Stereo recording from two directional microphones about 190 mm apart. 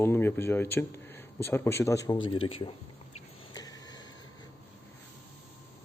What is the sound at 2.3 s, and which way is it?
Speech, 30° left (ahead or behind).